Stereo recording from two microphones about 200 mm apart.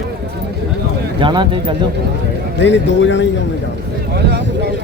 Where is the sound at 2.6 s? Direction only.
65° left (ahead or behind).